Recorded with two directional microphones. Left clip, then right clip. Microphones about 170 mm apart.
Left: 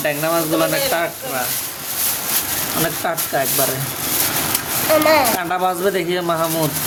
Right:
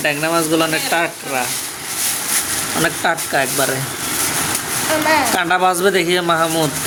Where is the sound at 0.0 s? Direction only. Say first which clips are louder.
Right 2 dB; centre (ahead or behind).